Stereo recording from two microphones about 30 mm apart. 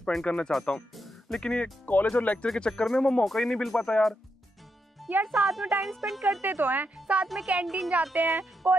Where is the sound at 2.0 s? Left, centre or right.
Left.